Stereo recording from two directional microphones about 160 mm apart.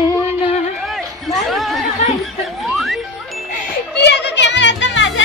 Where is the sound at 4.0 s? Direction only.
90° left.